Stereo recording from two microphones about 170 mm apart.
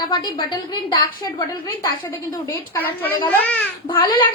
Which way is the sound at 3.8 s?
30° left (ahead or behind).